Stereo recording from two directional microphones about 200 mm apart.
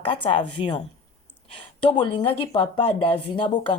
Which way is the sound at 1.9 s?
25° left (ahead or behind).